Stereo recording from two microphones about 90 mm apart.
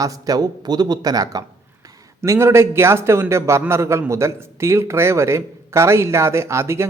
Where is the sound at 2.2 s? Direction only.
30° right (ahead or behind).